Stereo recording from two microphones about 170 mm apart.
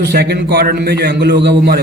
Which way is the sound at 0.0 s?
75° right (ahead or behind).